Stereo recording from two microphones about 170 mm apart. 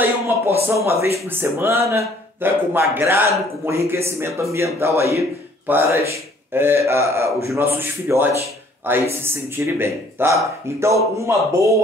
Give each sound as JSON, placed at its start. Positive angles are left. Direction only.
{"t": 0.7, "sound": "a man's voice", "side_deg": -15}